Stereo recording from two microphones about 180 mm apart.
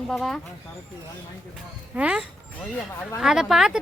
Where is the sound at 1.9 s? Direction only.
5° right (ahead or behind).